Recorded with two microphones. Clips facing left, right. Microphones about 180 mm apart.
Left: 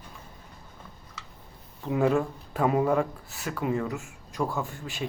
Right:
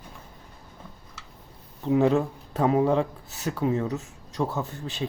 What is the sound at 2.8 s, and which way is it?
Speech, 20° right (ahead or behind).